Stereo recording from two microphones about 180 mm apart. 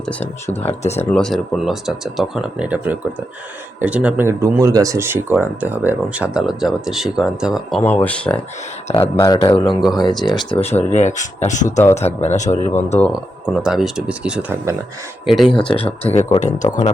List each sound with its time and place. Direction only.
0.5 s speech: 35° left (ahead or behind)
0.9 s speech: 5° left (ahead or behind)
7.9 s speech: 10° left (ahead or behind)
8.9 s speech: 20° left (ahead or behind)
10.9 s speech: 40° left (ahead or behind)
13.6 s speech: 5° right (ahead or behind)
15.7 s speech: 35° left (ahead or behind)